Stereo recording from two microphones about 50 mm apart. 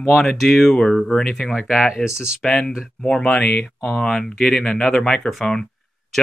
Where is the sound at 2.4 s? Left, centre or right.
Centre.